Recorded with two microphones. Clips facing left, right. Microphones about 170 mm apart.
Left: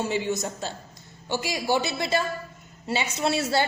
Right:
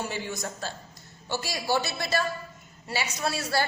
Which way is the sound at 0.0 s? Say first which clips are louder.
Left 6 dB; 20° left (ahead or behind).